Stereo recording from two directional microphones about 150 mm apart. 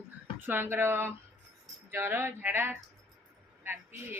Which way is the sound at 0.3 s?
15° right (ahead or behind).